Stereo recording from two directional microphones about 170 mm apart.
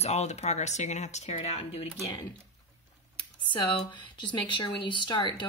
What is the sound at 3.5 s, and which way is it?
A woman's voice, 30° left (ahead or behind).